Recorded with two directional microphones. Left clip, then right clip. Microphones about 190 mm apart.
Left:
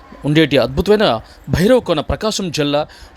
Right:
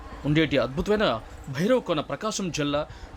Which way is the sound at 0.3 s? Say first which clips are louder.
Left 10 dB; 35° left (ahead or behind).